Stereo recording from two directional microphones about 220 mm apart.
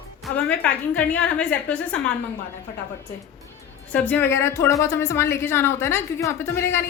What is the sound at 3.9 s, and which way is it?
A woman's voice, 5° left (ahead or behind).